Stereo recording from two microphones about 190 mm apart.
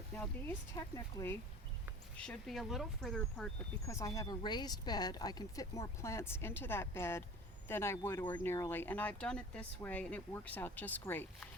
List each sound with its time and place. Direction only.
0.2 s speech: 10° left (ahead or behind)
3.8 s speech: 15° left (ahead or behind)